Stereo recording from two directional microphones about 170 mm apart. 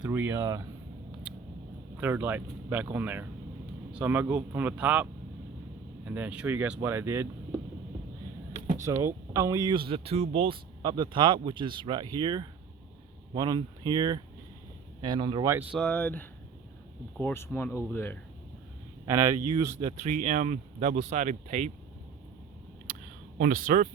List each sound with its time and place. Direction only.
0.0 s speech: 10° right (ahead or behind)
2.0 s speech: 10° right (ahead or behind)
6.1 s speech: 10° right (ahead or behind)
8.5 s a sound: 50° right (ahead or behind)
8.8 s speech: 15° right (ahead or behind)
15.7 s speech: 5° left (ahead or behind)
19.0 s speech: 20° right (ahead or behind)
20.1 s speech: 45° right (ahead or behind)
23.4 s speech: 55° right (ahead or behind)